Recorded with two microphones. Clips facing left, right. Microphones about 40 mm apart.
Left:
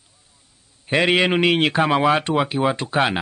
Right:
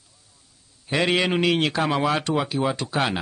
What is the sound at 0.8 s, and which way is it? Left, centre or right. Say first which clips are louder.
Speech: left 4 dB; left.